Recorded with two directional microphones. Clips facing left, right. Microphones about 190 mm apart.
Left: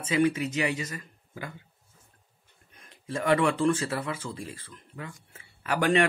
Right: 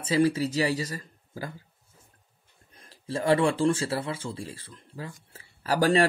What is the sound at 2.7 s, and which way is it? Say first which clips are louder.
Speech: right 1 dB; 35° right (ahead or behind).